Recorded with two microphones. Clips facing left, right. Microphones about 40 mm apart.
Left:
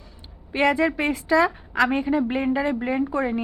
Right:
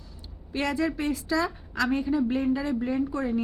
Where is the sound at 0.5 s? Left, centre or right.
Left.